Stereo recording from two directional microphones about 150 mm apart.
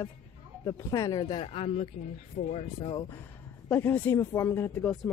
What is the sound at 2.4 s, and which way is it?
Speech, 55° left (ahead or behind).